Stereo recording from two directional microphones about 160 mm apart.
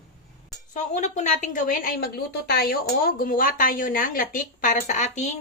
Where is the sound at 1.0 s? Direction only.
45° left (ahead or behind).